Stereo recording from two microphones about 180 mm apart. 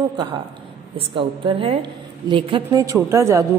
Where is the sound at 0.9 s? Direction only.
30° right (ahead or behind).